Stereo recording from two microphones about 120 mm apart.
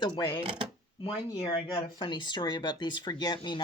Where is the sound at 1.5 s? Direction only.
35° left (ahead or behind).